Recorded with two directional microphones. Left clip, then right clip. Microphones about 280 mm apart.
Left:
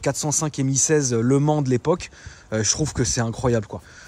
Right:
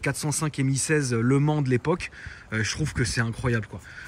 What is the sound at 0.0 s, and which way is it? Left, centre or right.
Speech, centre.